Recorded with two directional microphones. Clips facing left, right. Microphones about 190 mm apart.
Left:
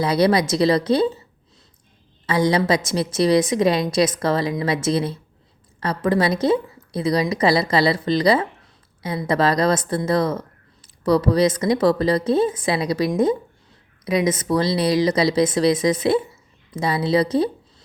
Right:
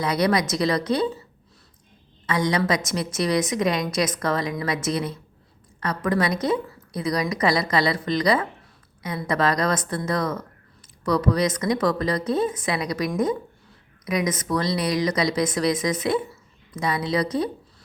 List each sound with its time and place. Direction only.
0.0 s speech: 30° left (ahead or behind)
2.2 s a woman's voice: 30° left (ahead or behind)